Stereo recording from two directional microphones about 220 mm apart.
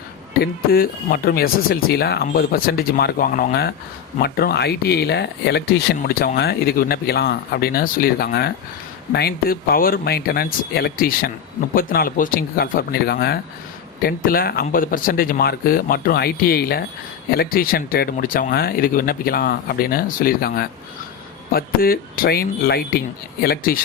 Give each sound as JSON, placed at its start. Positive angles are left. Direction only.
{"t": 0.7, "sound": "speech", "side_deg": 45}